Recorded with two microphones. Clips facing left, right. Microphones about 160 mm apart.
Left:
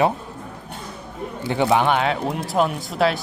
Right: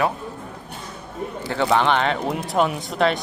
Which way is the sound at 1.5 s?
15° left (ahead or behind).